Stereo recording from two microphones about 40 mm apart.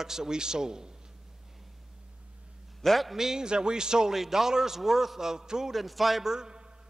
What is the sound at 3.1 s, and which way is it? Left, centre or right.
A man's voice, centre.